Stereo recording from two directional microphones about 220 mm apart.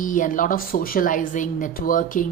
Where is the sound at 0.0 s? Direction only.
35° left (ahead or behind).